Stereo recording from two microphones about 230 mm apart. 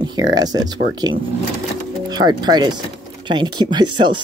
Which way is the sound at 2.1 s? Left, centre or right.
Centre.